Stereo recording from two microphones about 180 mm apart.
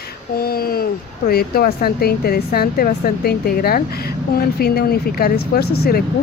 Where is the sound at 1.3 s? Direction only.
55° left (ahead or behind).